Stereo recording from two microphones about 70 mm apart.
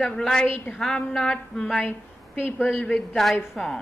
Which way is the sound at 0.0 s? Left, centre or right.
Centre.